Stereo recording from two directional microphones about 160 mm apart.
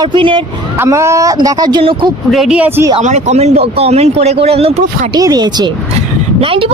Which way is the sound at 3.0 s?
45° right (ahead or behind).